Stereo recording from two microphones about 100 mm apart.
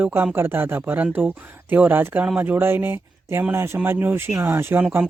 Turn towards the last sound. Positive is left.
turn(degrees=-20)  # may be behind; listen again after turning